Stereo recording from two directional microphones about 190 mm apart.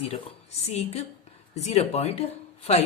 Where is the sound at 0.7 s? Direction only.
35° left (ahead or behind).